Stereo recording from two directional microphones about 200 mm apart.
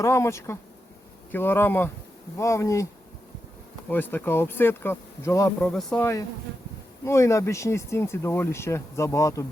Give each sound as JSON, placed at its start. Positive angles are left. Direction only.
{"t": 0.0, "sound": "speech", "side_deg": 15}
{"t": 3.8, "sound": "speech", "side_deg": 10}
{"t": 5.6, "sound": "speech", "side_deg": 5}